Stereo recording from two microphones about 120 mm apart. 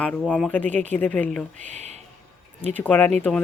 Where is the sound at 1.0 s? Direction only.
10° left (ahead or behind).